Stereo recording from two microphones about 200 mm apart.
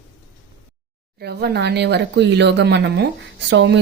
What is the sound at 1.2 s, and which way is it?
A woman's voice, 55° right (ahead or behind).